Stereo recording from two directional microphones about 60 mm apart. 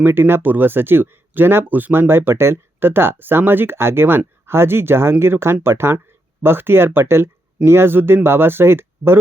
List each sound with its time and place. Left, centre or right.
0.0 s speech: right